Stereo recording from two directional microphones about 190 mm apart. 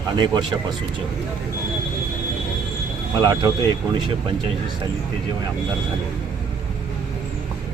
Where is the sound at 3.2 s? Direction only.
20° right (ahead or behind).